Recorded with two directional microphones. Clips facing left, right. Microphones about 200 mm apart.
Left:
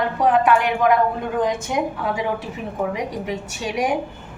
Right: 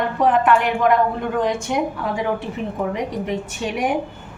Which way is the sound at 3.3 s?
50° right (ahead or behind).